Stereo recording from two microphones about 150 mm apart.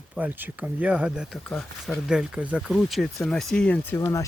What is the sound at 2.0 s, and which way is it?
Speech, 5° right (ahead or behind).